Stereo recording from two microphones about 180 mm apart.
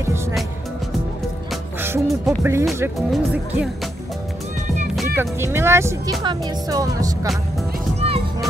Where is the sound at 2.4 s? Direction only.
15° right (ahead or behind).